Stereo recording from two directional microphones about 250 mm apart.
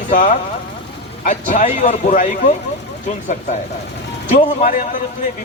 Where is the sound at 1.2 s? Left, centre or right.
Left.